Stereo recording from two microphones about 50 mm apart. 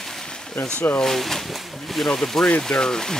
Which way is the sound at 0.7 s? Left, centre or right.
Centre.